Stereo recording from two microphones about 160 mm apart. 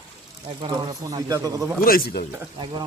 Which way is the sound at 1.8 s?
65° left (ahead or behind).